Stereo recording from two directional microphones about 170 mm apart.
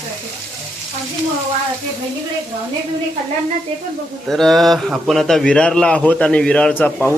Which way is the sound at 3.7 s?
35° right (ahead or behind).